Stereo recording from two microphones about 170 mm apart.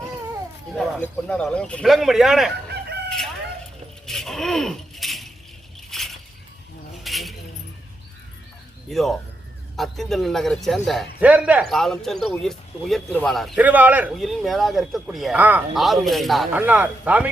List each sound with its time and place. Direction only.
0.7 s speech: 5° left (ahead or behind)
2.6 s chicken: 75° right (ahead or behind)
4.0 s a sound: 5° left (ahead or behind)
5.9 s glass: centre (ahead or behind)
7.0 s keys jangling: centre (ahead or behind)
8.9 s speech: centre (ahead or behind)
11.6 s speech: centre (ahead or behind)
13.6 s speech: 10° right (ahead or behind)